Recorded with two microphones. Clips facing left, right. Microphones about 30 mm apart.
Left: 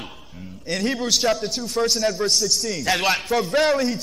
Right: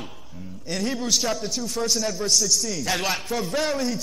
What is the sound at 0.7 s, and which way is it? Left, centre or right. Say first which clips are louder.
A man's voice: left 3 dB; centre.